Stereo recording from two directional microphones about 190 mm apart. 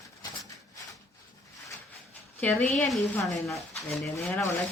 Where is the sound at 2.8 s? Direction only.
Centre (ahead or behind).